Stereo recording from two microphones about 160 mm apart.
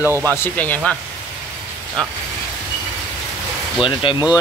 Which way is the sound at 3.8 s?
30° left (ahead or behind).